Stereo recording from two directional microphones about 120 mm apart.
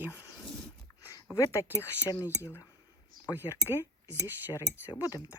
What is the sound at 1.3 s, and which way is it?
Speech, 25° left (ahead or behind).